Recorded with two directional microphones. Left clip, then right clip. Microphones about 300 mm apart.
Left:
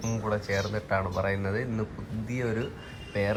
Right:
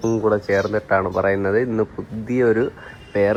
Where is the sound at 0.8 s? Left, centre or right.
Right.